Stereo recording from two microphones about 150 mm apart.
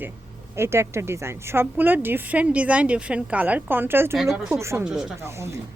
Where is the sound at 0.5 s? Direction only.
15° right (ahead or behind).